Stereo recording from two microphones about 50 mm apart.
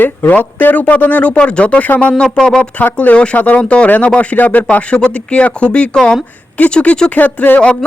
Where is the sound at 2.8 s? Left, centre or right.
Left.